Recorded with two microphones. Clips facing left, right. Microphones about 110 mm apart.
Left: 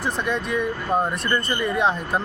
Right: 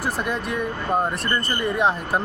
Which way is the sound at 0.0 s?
5° right (ahead or behind).